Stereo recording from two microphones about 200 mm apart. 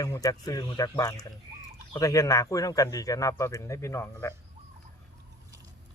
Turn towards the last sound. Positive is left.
turn(degrees=15)  # may be behind; listen again after turning